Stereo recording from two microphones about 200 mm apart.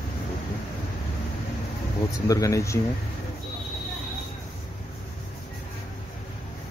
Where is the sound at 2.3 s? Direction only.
15° left (ahead or behind).